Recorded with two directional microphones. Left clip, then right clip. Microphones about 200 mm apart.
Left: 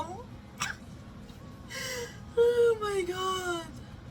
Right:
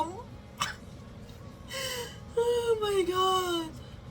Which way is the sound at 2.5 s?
25° right (ahead or behind).